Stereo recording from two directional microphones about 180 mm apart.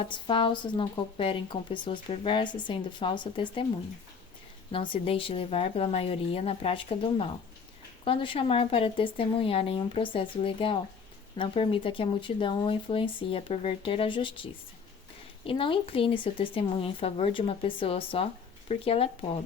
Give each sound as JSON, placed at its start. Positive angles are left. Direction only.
{"t": 0.0, "sound": "speech", "side_deg": 30}
{"t": 4.7, "sound": "speech", "side_deg": 30}